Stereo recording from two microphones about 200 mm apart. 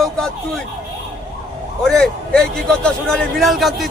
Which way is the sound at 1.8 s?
Centre (ahead or behind).